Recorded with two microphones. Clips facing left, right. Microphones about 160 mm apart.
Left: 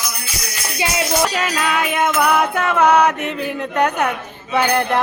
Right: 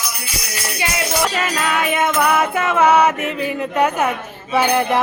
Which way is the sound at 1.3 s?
Centre (ahead or behind).